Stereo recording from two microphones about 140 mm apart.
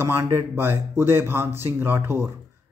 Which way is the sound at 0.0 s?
20° right (ahead or behind).